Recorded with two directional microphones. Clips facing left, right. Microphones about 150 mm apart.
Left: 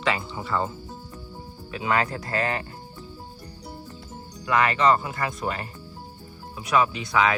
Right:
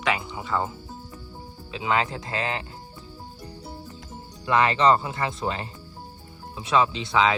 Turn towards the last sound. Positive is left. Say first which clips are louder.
# right 1 dB
turn(degrees=-25)  # may be behind; listen again after turning